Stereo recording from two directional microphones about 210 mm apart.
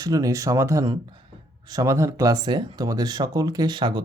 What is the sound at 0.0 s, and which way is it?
Speech, 15° right (ahead or behind).